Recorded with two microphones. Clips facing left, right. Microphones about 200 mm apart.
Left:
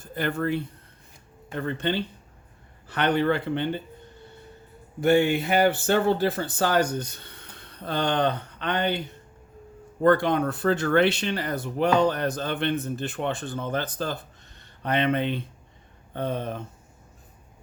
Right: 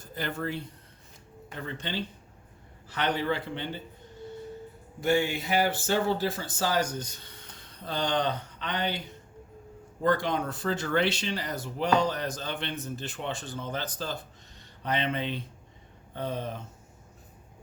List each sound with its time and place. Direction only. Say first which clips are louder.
0.1 s speech: left 7 dB; 55° left (ahead or behind)
4.9 s speech: left 6 dB; 60° left (ahead or behind)
10.0 s speech: left 6 dB; 60° left (ahead or behind)